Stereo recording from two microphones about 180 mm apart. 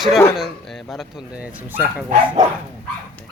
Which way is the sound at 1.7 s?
10° right (ahead or behind).